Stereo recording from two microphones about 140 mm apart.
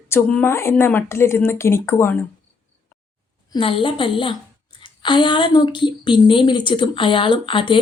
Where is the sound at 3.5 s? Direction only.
40° left (ahead or behind).